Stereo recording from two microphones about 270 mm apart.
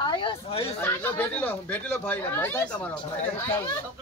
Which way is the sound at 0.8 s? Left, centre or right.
Centre.